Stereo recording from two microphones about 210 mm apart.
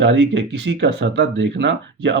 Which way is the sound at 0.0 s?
60° right (ahead or behind).